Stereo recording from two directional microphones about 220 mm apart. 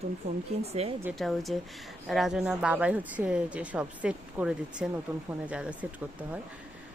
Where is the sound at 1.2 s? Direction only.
Centre (ahead or behind).